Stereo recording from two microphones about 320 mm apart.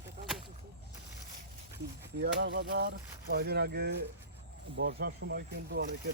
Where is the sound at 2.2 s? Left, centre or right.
Right.